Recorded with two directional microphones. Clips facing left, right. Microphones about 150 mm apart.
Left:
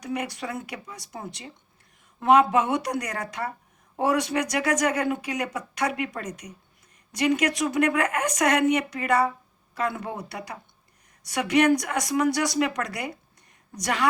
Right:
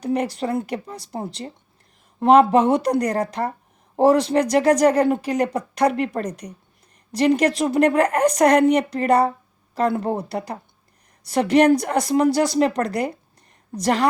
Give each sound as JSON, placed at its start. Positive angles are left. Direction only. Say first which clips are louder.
{"t": 0.1, "sound": "a woman's voice", "louder": "right 8 dB", "side_deg": -30}